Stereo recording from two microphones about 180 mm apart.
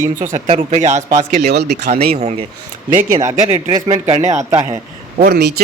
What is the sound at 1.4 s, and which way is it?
Speech, 65° right (ahead or behind).